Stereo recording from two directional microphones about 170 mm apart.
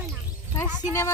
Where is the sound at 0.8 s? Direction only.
15° left (ahead or behind).